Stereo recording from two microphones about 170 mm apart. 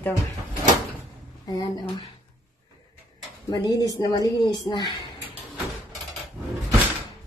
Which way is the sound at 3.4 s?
25° left (ahead or behind).